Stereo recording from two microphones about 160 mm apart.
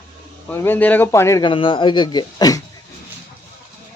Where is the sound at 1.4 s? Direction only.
35° left (ahead or behind).